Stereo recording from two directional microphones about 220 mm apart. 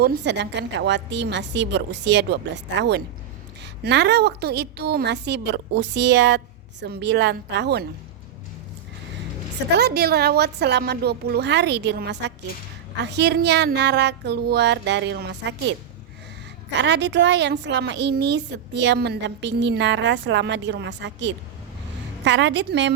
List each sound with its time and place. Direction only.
0.0 s a woman's voice: 50° right (ahead or behind)
9.7 s a woman's voice: 45° right (ahead or behind)
16.7 s a woman's voice: 50° right (ahead or behind)